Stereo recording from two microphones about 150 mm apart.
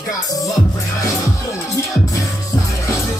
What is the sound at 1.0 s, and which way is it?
Music, 20° left (ahead or behind).